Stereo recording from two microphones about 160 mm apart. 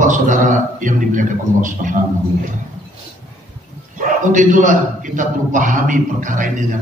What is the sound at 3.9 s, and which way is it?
A man's voice, 55° right (ahead or behind).